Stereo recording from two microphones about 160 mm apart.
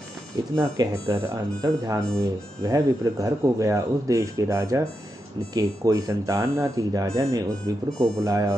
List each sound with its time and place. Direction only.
0.6 s speech: 20° right (ahead or behind)